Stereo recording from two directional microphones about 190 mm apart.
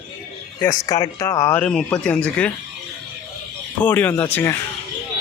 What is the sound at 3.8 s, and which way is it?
Speech, 10° left (ahead or behind).